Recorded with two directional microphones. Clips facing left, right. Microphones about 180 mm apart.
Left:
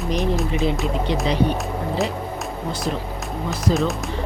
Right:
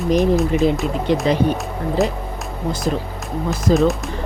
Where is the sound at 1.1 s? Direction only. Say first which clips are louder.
Right 8 dB; 50° right (ahead or behind).